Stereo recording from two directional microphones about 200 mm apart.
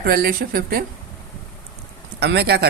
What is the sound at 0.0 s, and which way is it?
Speech, 50° right (ahead or behind).